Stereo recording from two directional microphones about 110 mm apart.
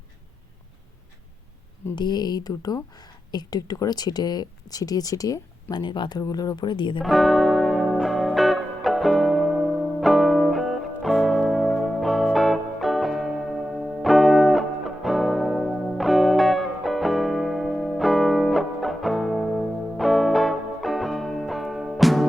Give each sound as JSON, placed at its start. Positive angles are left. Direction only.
{"t": 2.0, "sound": "speech", "side_deg": 40}
{"t": 5.7, "sound": "speech", "side_deg": 45}
{"t": 7.0, "sound": "music", "side_deg": 0}